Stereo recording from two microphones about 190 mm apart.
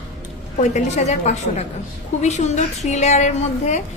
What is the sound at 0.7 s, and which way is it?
A woman's voice, 35° left (ahead or behind).